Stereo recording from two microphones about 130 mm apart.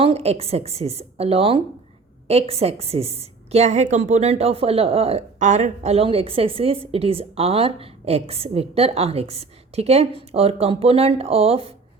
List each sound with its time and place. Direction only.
0.0 s a woman's voice: 50° right (ahead or behind)